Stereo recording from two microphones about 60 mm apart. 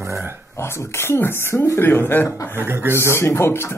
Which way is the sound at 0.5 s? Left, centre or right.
Left.